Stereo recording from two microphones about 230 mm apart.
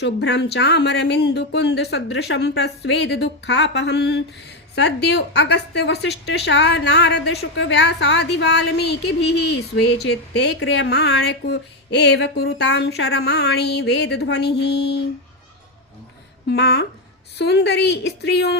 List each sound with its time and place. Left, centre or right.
0.0 s a woman's voice: left
16.5 s a woman's voice: left